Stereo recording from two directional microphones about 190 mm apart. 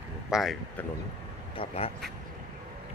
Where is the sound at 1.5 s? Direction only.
30° left (ahead or behind).